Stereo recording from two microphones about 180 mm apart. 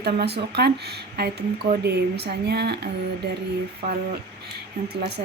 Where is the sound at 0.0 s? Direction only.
65° right (ahead or behind).